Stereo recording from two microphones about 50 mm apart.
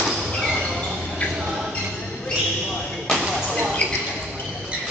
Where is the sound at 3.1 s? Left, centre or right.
Centre.